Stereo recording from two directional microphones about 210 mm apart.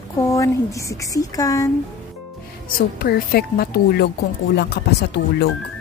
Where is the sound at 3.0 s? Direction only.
45° left (ahead or behind).